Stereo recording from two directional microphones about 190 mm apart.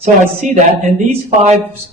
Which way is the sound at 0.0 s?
40° right (ahead or behind).